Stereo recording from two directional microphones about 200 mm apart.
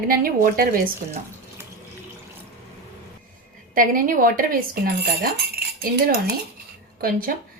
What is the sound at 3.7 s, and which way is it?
Speech, 45° right (ahead or behind).